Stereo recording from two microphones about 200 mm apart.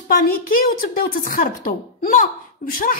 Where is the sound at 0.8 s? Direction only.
45° left (ahead or behind).